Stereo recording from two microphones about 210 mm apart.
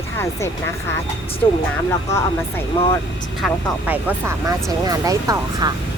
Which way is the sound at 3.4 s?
10° right (ahead or behind).